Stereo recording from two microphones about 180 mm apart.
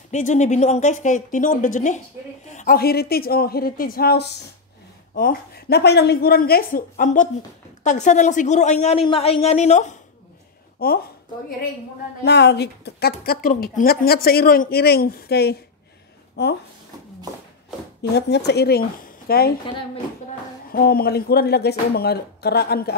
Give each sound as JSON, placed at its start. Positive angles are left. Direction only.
{"t": 0.1, "sound": "a woman's voice", "side_deg": 40}
{"t": 10.8, "sound": "a woman's voice", "side_deg": 60}
{"t": 12.3, "sound": "a woman's voice", "side_deg": 70}
{"t": 18.1, "sound": "a woman's voice", "side_deg": 65}
{"t": 20.7, "sound": "a woman's voice", "side_deg": 55}